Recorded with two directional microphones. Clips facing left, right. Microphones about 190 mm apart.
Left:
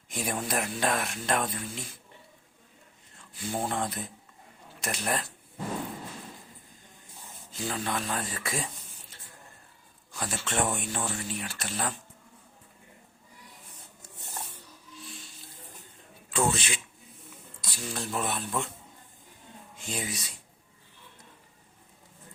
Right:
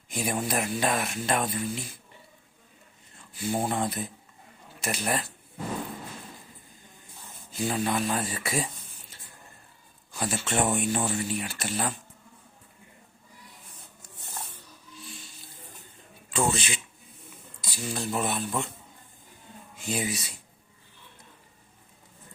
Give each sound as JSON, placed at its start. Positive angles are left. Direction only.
{"t": 0.1, "sound": "speech", "side_deg": 0}
{"t": 3.3, "sound": "speech", "side_deg": -10}
{"t": 7.5, "sound": "speech", "side_deg": -10}
{"t": 16.3, "sound": "speech", "side_deg": 0}
{"t": 19.7, "sound": "speech", "side_deg": -5}